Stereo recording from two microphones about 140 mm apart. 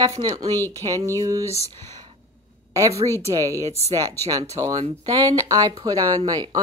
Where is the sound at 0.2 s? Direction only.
25° right (ahead or behind).